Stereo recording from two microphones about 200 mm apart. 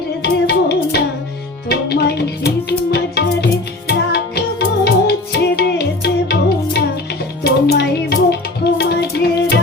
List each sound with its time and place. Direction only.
0.2 s music: 55° left (ahead or behind)